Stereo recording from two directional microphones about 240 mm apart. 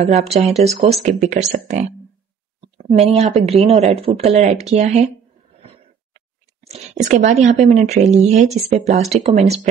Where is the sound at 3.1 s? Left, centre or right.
Right.